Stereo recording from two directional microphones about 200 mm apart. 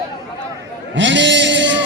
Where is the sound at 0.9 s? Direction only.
65° right (ahead or behind).